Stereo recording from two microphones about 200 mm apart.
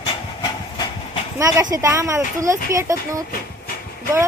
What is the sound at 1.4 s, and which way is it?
Speech, 15° right (ahead or behind).